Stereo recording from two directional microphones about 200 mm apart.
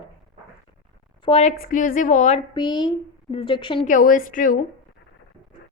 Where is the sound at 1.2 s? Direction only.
35° left (ahead or behind).